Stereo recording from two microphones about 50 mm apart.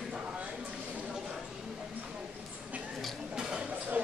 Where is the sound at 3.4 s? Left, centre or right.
Centre.